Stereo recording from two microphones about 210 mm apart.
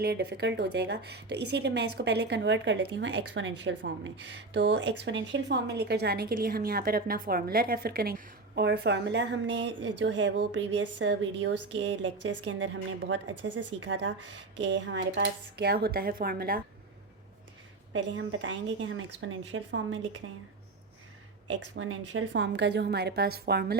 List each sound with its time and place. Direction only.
0.0 s a woman's voice: 50° right (ahead or behind)
17.9 s a woman's voice: 60° right (ahead or behind)
21.4 s speech: 65° right (ahead or behind); by 23.7 s 50° right (ahead or behind)